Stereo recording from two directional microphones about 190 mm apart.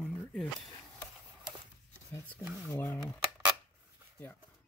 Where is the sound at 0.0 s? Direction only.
5° left (ahead or behind).